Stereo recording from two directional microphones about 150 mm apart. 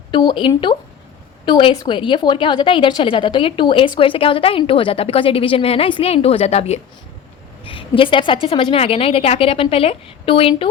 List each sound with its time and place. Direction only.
0.1 s a woman's voice: 30° left (ahead or behind)